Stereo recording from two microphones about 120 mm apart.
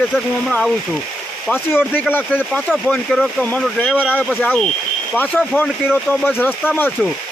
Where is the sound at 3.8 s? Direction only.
5° right (ahead or behind).